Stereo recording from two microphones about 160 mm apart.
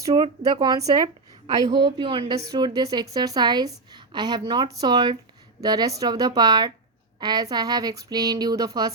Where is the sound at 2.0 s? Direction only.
30° right (ahead or behind).